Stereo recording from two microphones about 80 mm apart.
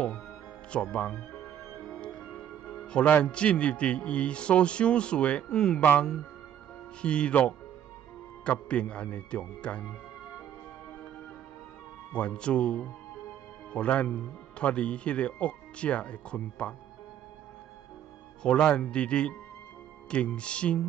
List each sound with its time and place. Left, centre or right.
0.9 s speech: centre
1.8 s music: centre
3.3 s speech: centre
5.8 s speech: left
7.0 s speech: centre
12.1 s speech: centre
18.4 s speech: centre